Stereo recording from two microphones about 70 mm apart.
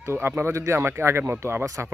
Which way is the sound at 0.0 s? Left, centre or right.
Right.